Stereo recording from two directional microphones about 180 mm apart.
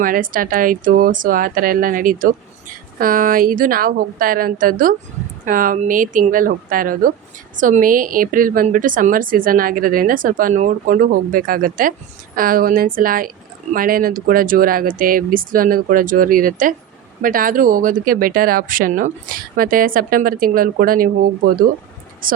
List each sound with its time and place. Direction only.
0.0 s a woman's voice: 50° right (ahead or behind)